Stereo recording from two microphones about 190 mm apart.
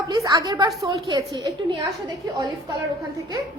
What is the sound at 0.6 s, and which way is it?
Speech, centre (ahead or behind).